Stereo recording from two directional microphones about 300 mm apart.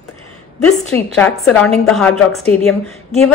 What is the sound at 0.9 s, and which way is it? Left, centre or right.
A woman's voice, centre.